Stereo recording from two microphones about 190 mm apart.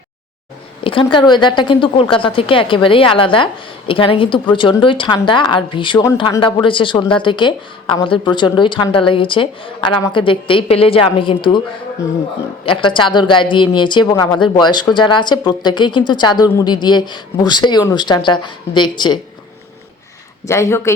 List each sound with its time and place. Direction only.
0.9 s speech: 25° left (ahead or behind)
12.6 s speech: 25° left (ahead or behind)
20.5 s speech: 15° left (ahead or behind)